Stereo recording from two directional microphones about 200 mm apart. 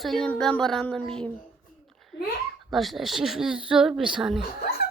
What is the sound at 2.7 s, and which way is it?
A woman's voice, centre (ahead or behind).